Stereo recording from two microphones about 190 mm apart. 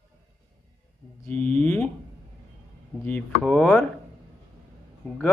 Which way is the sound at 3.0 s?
5° left (ahead or behind).